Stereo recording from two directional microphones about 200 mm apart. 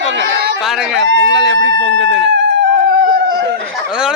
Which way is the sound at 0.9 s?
60° right (ahead or behind).